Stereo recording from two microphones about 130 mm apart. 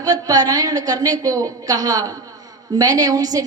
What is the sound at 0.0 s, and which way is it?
A woman's voice, 30° right (ahead or behind).